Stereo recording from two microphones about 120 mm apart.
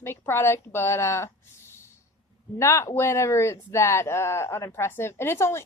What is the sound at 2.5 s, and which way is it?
A woman's voice, 25° left (ahead or behind).